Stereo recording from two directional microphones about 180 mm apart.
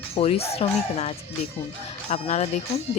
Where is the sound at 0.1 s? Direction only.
35° left (ahead or behind).